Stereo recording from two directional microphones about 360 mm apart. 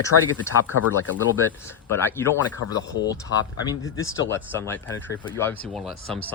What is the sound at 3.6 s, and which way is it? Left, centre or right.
Speech, centre.